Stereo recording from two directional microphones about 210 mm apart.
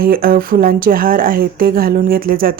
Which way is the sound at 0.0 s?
45° right (ahead or behind).